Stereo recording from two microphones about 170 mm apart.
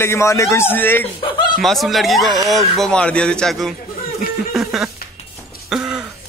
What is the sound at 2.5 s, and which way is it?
Speech, 5° left (ahead or behind).